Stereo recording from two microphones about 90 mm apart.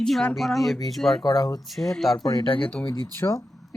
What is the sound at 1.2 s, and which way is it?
Speech, 55° left (ahead or behind).